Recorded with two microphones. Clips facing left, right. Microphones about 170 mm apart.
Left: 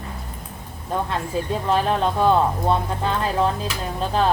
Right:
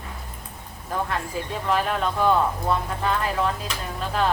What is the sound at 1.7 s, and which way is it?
Speech, 30° left (ahead or behind).